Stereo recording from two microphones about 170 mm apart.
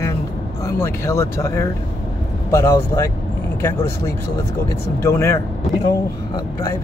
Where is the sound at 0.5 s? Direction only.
20° left (ahead or behind).